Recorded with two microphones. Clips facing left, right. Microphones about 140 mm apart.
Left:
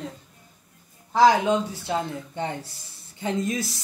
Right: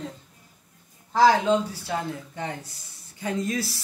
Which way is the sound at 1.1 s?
15° left (ahead or behind).